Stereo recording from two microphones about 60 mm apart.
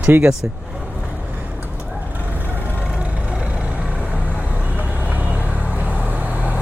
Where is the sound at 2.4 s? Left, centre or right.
Right.